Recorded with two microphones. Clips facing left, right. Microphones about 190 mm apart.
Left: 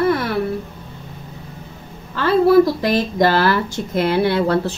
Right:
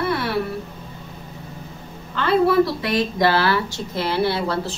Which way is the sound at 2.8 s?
45° left (ahead or behind).